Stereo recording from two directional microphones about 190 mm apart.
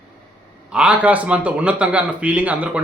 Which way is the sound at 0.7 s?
5° right (ahead or behind).